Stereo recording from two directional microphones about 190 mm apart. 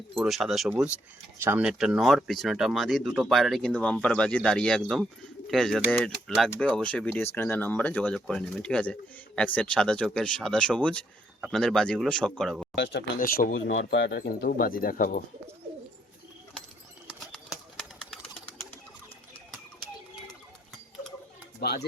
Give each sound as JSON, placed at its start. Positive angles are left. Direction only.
{"t": 0.3, "sound": "speech", "side_deg": 0}
{"t": 12.7, "sound": "speech", "side_deg": 65}
{"t": 13.1, "sound": "speech", "side_deg": 50}
{"t": 13.5, "sound": "speech", "side_deg": 85}
{"t": 17.2, "sound": "bird", "side_deg": 0}
{"t": 21.6, "sound": "speech", "side_deg": 60}